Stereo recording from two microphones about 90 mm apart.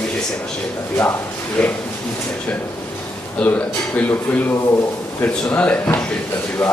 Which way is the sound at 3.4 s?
15° left (ahead or behind).